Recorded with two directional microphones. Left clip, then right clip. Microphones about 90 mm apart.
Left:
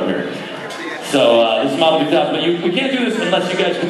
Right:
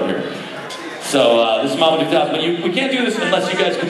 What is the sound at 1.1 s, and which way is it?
A man's voice, 15° right (ahead or behind).